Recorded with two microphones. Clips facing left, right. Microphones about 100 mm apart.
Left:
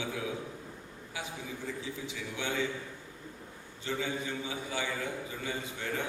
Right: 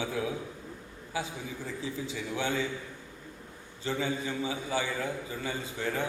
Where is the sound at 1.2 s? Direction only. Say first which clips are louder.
Right 4 dB; 35° right (ahead or behind).